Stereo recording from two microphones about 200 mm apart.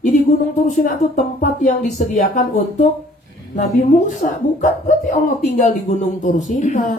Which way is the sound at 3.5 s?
35° left (ahead or behind).